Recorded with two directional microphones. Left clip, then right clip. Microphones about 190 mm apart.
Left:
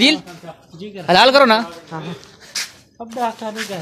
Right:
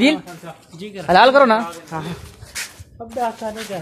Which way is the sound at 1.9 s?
30° right (ahead or behind).